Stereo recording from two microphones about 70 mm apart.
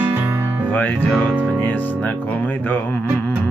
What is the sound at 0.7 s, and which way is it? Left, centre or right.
Music, left.